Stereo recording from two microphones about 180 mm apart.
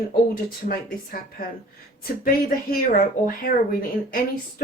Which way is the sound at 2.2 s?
55° left (ahead or behind).